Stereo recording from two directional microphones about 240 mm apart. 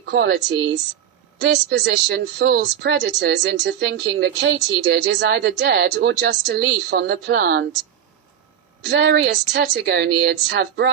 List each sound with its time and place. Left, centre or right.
0.0 s speech: right
8.8 s speech: right